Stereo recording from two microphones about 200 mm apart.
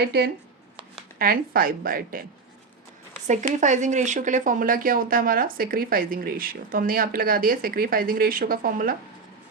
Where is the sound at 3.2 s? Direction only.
35° right (ahead or behind).